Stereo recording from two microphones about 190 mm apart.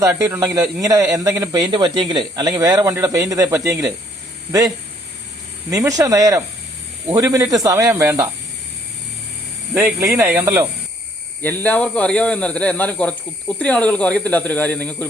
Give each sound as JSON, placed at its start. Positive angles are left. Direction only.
{"t": 0.0, "sound": "speech", "side_deg": -15}
{"t": 5.7, "sound": "speech", "side_deg": -20}
{"t": 9.7, "sound": "speech", "side_deg": -10}
{"t": 11.4, "sound": "speech", "side_deg": 10}